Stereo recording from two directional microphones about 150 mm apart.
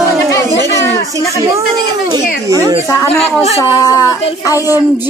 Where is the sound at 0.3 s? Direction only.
20° left (ahead or behind).